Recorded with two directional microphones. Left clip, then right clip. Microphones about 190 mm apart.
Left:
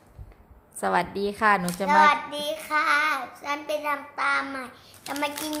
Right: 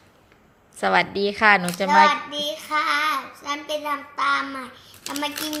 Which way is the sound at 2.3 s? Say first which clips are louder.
Right 2 dB; 15° left (ahead or behind).